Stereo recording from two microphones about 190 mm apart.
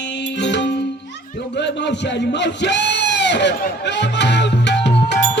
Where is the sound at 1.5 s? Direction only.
65° left (ahead or behind).